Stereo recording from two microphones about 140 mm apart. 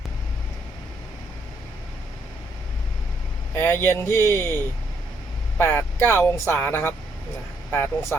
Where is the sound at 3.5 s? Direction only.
20° left (ahead or behind).